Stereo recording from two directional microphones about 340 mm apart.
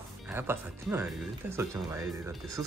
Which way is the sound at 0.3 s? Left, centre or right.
Centre.